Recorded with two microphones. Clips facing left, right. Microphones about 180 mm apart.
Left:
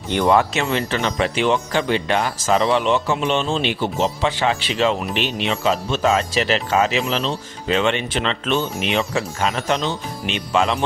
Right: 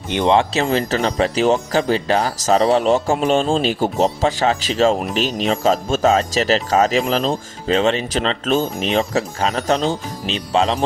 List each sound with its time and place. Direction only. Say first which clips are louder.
0.1 s speech: right 1 dB; 20° right (ahead or behind)
0.6 s speech: right 3 dB; 40° right (ahead or behind)